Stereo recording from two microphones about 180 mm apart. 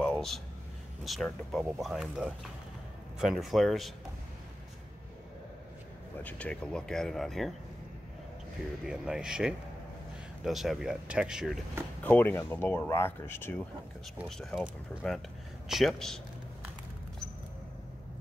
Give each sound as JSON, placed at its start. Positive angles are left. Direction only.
{"t": 0.0, "sound": "a sound", "side_deg": 0}
{"t": 1.0, "sound": "speech", "side_deg": 0}
{"t": 6.2, "sound": "speech", "side_deg": 5}
{"t": 8.8, "sound": "speech", "side_deg": -5}
{"t": 12.0, "sound": "speech", "side_deg": 10}